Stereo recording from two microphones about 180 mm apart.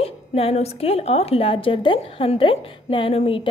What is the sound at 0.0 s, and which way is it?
A woman's voice, 35° left (ahead or behind).